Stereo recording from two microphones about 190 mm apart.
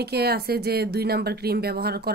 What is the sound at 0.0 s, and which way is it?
Speech, 55° right (ahead or behind).